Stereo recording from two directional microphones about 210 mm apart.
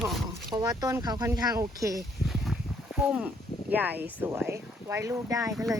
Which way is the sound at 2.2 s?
Centre (ahead or behind).